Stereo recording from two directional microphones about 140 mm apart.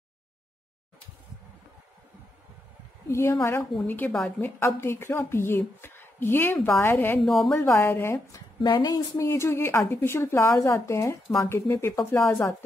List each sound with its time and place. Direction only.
3.1 s a woman's voice: 20° left (ahead or behind)
7.2 s speech: centre (ahead or behind)
7.6 s a woman's voice: 15° left (ahead or behind)
8.5 s a woman's voice: 35° left (ahead or behind)